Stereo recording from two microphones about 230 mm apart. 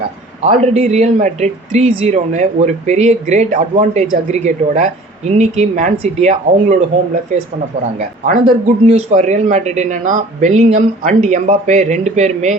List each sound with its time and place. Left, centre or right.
0.6 s speech: right
7.9 s speech: right